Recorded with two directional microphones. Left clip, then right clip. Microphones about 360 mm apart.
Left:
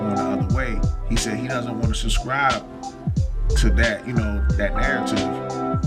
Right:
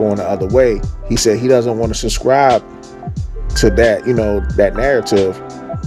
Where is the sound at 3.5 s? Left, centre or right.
Centre.